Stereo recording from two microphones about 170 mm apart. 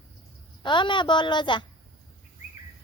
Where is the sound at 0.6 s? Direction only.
25° left (ahead or behind).